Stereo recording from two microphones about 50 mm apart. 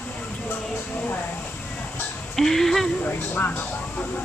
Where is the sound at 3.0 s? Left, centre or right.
Left.